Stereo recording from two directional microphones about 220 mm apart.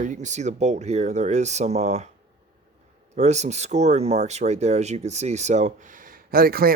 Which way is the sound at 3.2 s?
30° right (ahead or behind).